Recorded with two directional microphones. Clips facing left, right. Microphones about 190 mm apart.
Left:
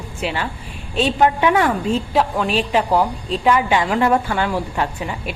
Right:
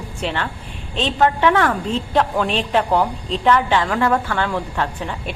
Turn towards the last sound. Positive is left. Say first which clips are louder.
# left 1 dB
turn(degrees=10)  # may be behind; listen again after turning